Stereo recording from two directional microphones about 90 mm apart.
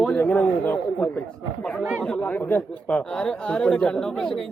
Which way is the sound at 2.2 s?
20° left (ahead or behind).